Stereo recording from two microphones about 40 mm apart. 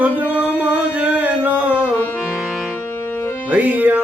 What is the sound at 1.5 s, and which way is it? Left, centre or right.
Music, right.